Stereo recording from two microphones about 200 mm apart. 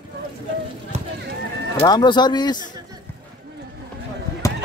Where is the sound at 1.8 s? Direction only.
20° left (ahead or behind).